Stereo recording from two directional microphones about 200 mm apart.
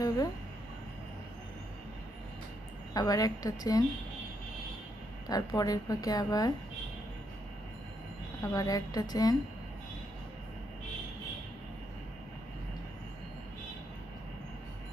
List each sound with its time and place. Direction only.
2.9 s a woman's voice: 20° left (ahead or behind)
5.3 s a woman's voice: 20° left (ahead or behind)
8.4 s a woman's voice: 15° left (ahead or behind)